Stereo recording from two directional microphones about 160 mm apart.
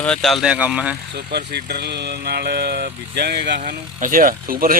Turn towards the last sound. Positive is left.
turn(degrees=-65)  # may be behind; listen again after turning